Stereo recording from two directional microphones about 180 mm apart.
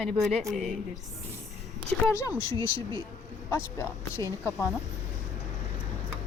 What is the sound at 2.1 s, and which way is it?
Speech, 15° left (ahead or behind).